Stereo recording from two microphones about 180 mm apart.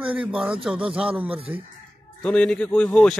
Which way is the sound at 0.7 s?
5° right (ahead or behind).